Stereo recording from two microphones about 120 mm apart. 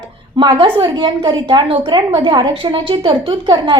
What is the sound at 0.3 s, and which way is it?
A woman's voice, 40° right (ahead or behind).